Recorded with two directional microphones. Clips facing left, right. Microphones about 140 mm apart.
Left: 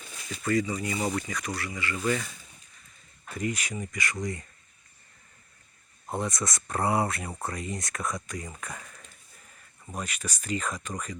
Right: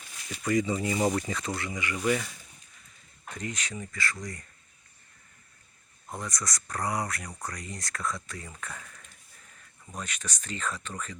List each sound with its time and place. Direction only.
0.4 s speech: 20° right (ahead or behind)
3.2 s speech: 10° left (ahead or behind)
6.1 s speech: 25° left (ahead or behind)
9.9 s speech: 10° left (ahead or behind)